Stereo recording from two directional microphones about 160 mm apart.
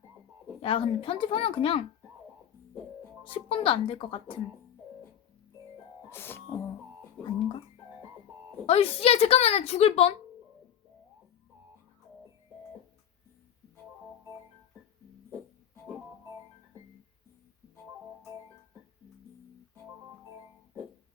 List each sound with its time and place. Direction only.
0.6 s speech: 35° left (ahead or behind)
3.2 s speech: 35° left (ahead or behind)
6.1 s music: 15° left (ahead or behind)
7.2 s speech: 30° left (ahead or behind)
8.6 s speech: 40° left (ahead or behind)